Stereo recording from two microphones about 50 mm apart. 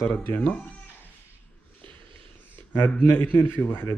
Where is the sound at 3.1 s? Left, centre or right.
Left.